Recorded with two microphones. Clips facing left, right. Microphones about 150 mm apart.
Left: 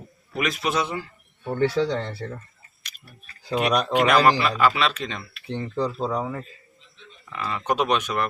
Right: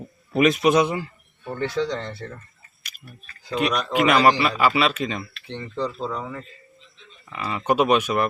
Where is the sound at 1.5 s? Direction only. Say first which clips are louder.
Left 3 dB; 5° left (ahead or behind).